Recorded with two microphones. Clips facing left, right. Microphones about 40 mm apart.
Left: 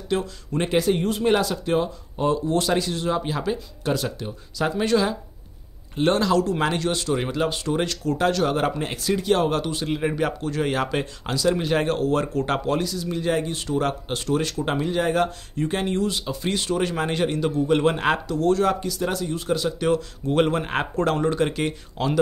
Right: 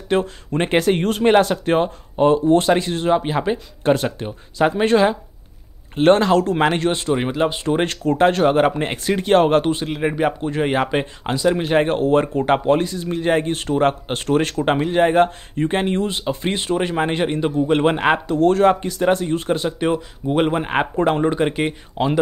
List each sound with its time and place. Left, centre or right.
0.1 s speech: right
9.9 s speech: right
18.2 s speech: right
19.9 s speech: centre